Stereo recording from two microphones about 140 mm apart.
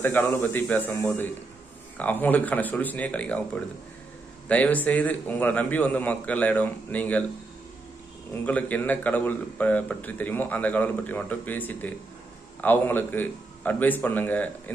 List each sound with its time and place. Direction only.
0.0 s a man's voice: 15° left (ahead or behind)
8.3 s a man's voice: 10° left (ahead or behind)